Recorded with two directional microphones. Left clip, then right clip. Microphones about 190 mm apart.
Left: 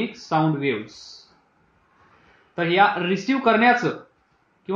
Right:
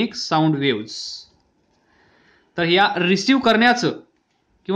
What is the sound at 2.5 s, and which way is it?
Speech, 40° right (ahead or behind).